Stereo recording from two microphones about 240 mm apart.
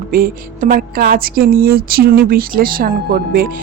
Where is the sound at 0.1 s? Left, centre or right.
Right.